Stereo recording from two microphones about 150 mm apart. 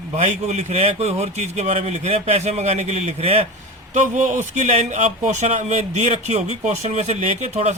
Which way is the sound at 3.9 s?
55° right (ahead or behind).